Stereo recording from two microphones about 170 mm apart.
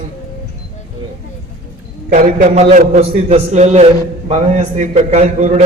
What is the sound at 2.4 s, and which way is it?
A man's voice, 40° right (ahead or behind).